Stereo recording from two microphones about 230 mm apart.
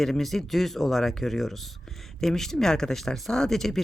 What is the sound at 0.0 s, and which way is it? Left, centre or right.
Speech, centre.